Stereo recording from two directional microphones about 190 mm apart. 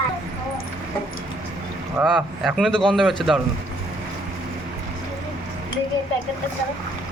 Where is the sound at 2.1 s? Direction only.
Centre (ahead or behind).